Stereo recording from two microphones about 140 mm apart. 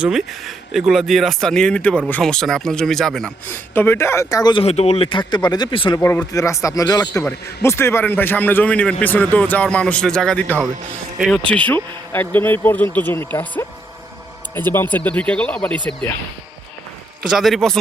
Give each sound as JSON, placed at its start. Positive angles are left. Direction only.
{"t": 0.0, "sound": "speech", "side_deg": -5}
{"t": 3.5, "sound": "a man's voice", "side_deg": 15}
{"t": 4.5, "sound": "speech", "side_deg": 45}
{"t": 6.0, "sound": "a man's voice", "side_deg": 20}
{"t": 14.7, "sound": "a man's voice", "side_deg": 15}
{"t": 17.2, "sound": "speech", "side_deg": 0}